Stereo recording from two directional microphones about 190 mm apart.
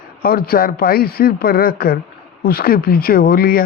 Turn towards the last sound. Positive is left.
turn(degrees=50)  # may be behind; listen again after turning